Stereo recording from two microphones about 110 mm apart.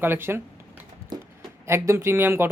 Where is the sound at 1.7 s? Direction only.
25° right (ahead or behind).